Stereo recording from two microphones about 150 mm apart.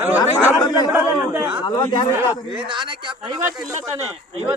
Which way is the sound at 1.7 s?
35° left (ahead or behind).